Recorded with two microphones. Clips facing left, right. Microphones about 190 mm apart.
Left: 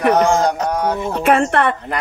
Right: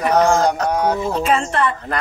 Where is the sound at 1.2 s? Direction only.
60° left (ahead or behind).